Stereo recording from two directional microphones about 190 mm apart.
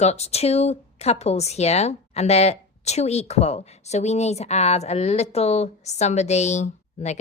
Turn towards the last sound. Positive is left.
turn(degrees=35)  # may be behind; listen again after turning